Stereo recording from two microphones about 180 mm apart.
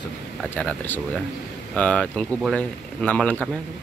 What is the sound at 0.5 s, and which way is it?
Speech, 10° left (ahead or behind).